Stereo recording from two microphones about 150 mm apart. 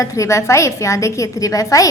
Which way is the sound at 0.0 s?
20° left (ahead or behind).